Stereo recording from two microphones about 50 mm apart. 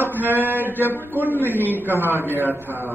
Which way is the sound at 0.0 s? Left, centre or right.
Right.